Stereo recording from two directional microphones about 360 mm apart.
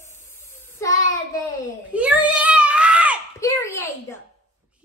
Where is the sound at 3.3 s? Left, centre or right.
Centre.